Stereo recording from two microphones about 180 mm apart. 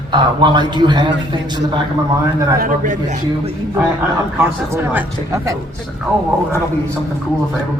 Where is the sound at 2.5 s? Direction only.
50° right (ahead or behind).